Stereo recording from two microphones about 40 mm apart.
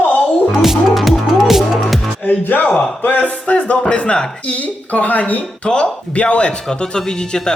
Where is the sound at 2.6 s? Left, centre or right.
Left.